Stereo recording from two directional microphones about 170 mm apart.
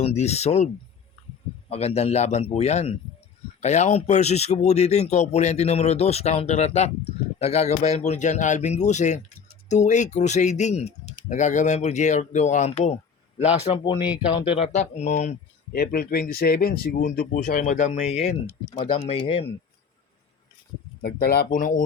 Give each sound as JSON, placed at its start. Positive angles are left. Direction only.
{"t": 0.0, "sound": "speech", "side_deg": 40}
{"t": 1.7, "sound": "speech", "side_deg": 35}
{"t": 13.7, "sound": "speech", "side_deg": 30}
{"t": 15.7, "sound": "speech", "side_deg": 60}
{"t": 21.0, "sound": "speech", "side_deg": 65}